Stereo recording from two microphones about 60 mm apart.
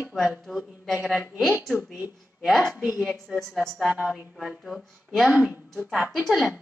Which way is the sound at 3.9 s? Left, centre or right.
Centre.